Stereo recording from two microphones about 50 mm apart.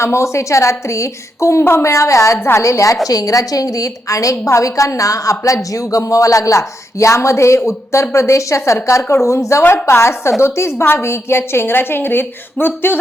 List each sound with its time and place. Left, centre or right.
0.0 s a woman's voice: left
9.7 s a woman's voice: left